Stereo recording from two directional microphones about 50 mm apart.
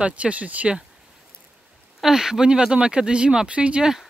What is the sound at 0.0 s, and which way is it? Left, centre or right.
Speech, right.